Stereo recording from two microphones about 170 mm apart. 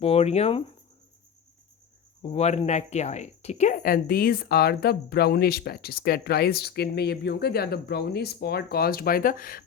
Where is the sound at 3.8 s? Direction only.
60° left (ahead or behind).